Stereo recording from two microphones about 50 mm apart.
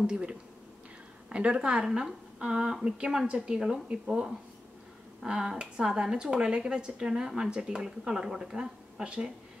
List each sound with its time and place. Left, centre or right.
0.0 s speech: right
5.2 s speech: centre